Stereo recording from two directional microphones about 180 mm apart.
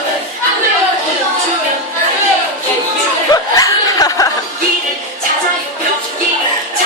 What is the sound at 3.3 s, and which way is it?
Laughter, 20° left (ahead or behind).